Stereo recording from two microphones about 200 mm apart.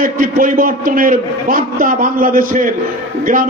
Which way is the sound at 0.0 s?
45° right (ahead or behind).